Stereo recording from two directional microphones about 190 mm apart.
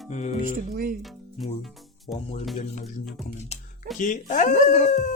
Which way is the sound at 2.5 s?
35° left (ahead or behind).